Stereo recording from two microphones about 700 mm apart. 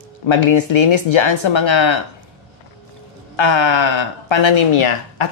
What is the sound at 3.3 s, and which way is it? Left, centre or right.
Speech, left.